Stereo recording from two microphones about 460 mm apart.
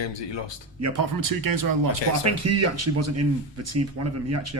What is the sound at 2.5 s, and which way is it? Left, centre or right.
Speech, right.